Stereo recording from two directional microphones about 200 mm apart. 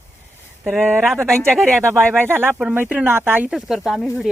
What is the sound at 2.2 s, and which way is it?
Speech, 10° right (ahead or behind).